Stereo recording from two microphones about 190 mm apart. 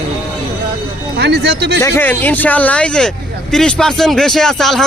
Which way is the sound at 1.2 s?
60° right (ahead or behind).